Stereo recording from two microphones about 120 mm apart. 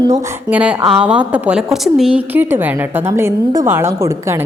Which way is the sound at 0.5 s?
10° right (ahead or behind).